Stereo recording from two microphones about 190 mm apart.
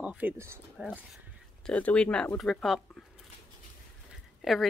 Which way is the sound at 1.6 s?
5° left (ahead or behind).